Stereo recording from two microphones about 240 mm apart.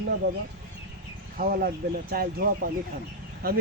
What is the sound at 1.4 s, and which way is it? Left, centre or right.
Speech, right.